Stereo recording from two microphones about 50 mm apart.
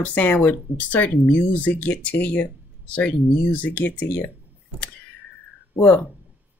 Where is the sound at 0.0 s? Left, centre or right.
Left.